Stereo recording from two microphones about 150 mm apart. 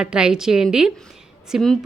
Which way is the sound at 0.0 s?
5° right (ahead or behind).